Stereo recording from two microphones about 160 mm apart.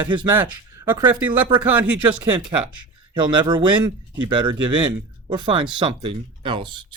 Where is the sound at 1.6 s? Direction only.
10° right (ahead or behind).